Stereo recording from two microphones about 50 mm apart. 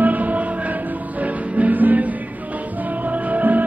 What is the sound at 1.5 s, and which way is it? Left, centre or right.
Music, right.